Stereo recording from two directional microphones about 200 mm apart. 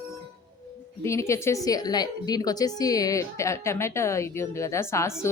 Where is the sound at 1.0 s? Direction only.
15° left (ahead or behind).